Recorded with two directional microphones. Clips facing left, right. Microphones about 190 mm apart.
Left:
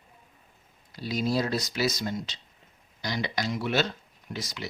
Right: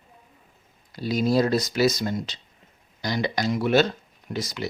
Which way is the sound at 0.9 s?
50° right (ahead or behind).